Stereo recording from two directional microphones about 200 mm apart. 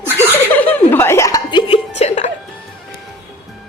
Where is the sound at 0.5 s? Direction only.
10° left (ahead or behind); by 2.3 s 35° left (ahead or behind).